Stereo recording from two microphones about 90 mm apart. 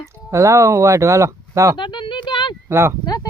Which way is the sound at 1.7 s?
60° left (ahead or behind).